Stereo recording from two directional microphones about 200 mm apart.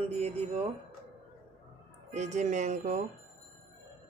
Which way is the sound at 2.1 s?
35° right (ahead or behind).